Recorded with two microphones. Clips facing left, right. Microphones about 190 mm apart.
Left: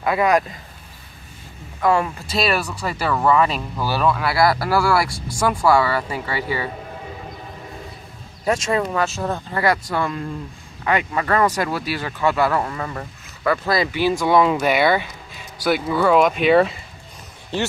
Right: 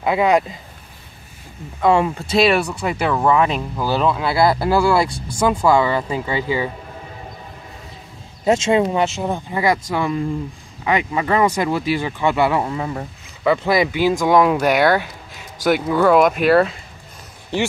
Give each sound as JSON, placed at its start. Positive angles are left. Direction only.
{"t": 0.0, "sound": "speech", "side_deg": -20}
{"t": 1.8, "sound": "speech", "side_deg": -25}
{"t": 8.5, "sound": "speech", "side_deg": -25}
{"t": 16.1, "sound": "speech", "side_deg": -5}